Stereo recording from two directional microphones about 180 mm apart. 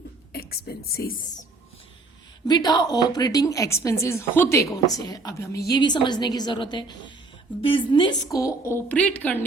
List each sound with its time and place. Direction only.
0.3 s a woman's voice: 60° left (ahead or behind)
2.5 s a woman's voice: 20° left (ahead or behind)